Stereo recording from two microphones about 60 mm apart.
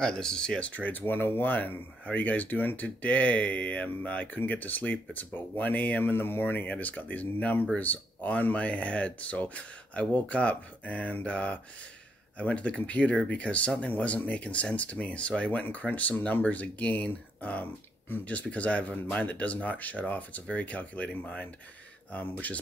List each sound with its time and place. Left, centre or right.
0.0 s speech: centre